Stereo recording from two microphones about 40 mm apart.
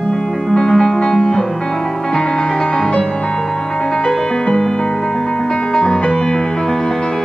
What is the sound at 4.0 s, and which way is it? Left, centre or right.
Music, centre.